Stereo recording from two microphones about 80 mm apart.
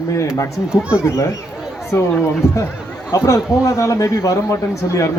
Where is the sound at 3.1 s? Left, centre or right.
Left.